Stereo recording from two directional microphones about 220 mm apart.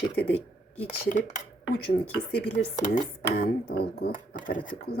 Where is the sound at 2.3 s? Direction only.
40° left (ahead or behind).